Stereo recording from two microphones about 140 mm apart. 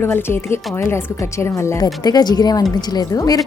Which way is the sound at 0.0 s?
15° left (ahead or behind).